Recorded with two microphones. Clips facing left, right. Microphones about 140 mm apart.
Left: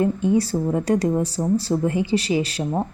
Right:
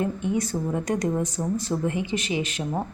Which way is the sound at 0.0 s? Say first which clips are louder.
Left 6 dB; 30° left (ahead or behind).